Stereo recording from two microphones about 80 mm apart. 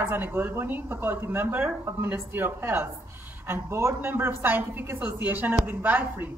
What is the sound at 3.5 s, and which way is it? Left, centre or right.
Speech, right.